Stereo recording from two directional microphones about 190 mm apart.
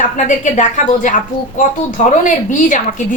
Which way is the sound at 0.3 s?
40° left (ahead or behind).